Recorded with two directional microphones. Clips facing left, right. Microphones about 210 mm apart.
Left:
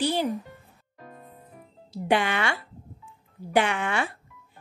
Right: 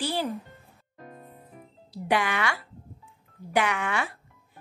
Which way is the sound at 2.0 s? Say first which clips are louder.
Left 2 dB; 30° left (ahead or behind).